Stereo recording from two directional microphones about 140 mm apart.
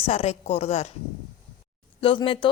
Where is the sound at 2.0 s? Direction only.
40° left (ahead or behind).